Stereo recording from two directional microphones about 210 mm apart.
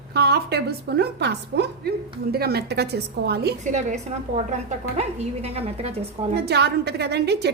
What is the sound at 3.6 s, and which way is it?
Speech, 35° right (ahead or behind).